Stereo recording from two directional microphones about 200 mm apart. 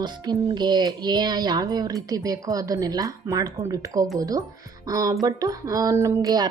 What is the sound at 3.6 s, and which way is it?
Speech, 15° right (ahead or behind).